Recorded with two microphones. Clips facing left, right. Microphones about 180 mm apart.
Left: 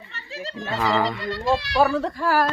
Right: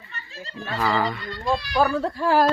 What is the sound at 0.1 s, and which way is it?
Music, 85° left.